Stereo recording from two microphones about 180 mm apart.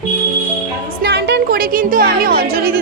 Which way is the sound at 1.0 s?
70° right (ahead or behind).